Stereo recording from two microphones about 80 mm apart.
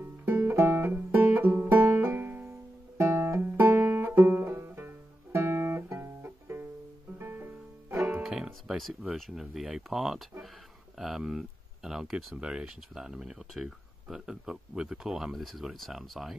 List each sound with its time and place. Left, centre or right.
0.2 s music: right
3.0 s music: right
8.2 s music: centre
9.1 s speech: centre